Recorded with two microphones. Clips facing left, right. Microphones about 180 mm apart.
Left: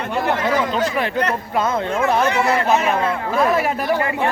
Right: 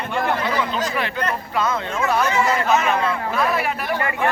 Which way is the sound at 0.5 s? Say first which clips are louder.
Left 3 dB; 45° left (ahead or behind).